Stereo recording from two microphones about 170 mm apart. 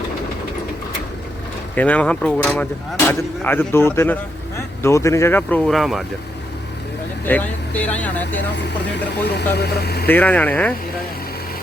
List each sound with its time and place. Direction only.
1.7 s speech: 10° left (ahead or behind)
7.3 s speech: 10° left (ahead or behind)
9.6 s speech: 70° left (ahead or behind)
10.1 s speech: 10° left (ahead or behind)